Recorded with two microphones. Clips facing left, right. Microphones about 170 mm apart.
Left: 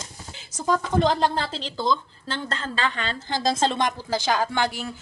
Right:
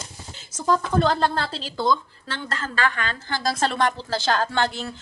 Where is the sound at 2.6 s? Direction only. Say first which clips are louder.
Right 6 dB; 25° left (ahead or behind).